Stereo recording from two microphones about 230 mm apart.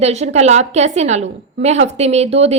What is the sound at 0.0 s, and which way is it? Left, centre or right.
A woman's voice, right.